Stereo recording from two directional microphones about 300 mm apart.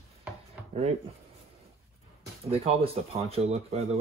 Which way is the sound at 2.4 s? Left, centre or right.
Right.